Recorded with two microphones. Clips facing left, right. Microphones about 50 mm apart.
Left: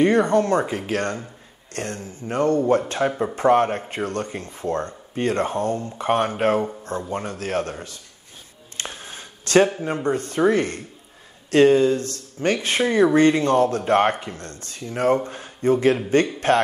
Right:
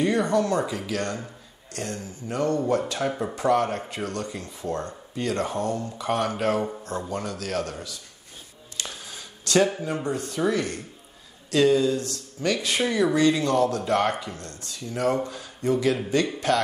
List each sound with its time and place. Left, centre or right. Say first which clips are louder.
0.0 s speech: left 5 dB; left
3.0 s speech: left 5 dB; left
3.3 s speech: left 5 dB; left
8.7 s a sound: left 3 dB; left
10.0 s speech: left 7 dB; left